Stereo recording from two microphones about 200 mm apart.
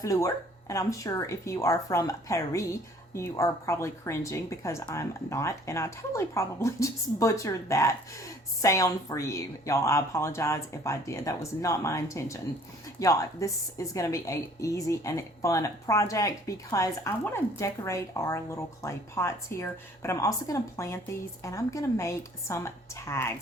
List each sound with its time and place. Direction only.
0.0 s speech: 15° left (ahead or behind)